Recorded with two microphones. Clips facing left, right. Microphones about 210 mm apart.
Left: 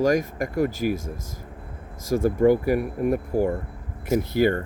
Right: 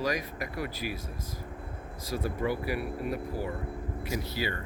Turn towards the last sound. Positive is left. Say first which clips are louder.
# left 12 dB
turn(degrees=50)  # may be behind; listen again after turning